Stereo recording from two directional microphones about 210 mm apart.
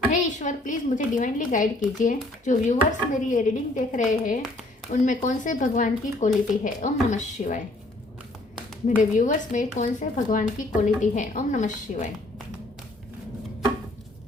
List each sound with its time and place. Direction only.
0.1 s a woman's voice: 40° left (ahead or behind)
9.0 s a woman's voice: 40° left (ahead or behind)